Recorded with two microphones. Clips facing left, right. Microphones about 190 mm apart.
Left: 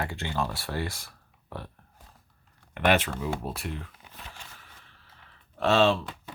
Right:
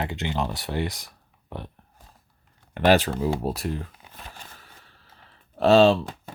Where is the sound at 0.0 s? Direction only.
20° right (ahead or behind).